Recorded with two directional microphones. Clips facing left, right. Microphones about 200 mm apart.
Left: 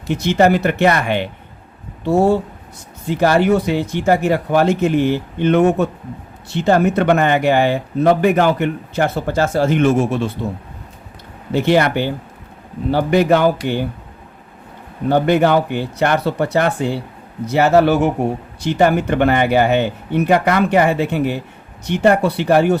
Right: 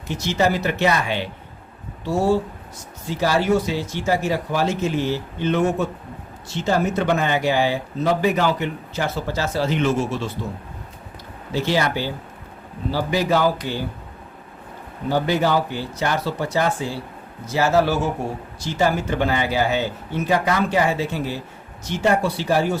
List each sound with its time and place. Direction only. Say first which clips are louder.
0.1 s speech: left 7 dB; 60° left (ahead or behind)
11.5 s speech: left 7 dB; 60° left (ahead or behind)
15.1 s speech: left 6 dB; 60° left (ahead or behind)